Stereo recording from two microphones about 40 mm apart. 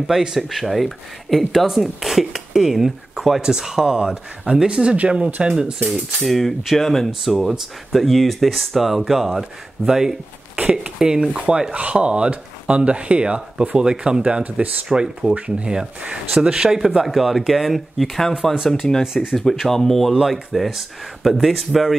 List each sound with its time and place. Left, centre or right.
0.0 s speech: centre
0.4 s speech: centre
6.2 s speech: centre
10.6 s a sound: right
11.0 s speech: centre
18.7 s speech: centre